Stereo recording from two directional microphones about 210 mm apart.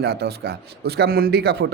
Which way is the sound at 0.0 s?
50° right (ahead or behind).